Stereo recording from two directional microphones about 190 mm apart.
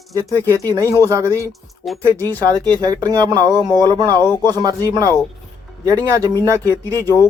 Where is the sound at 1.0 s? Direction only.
15° right (ahead or behind).